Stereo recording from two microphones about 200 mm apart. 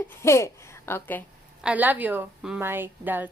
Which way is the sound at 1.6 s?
10° right (ahead or behind).